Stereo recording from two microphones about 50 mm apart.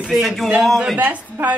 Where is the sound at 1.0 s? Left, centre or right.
Right.